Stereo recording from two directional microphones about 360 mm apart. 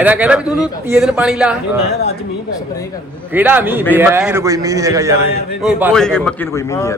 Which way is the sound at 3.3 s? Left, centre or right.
Centre.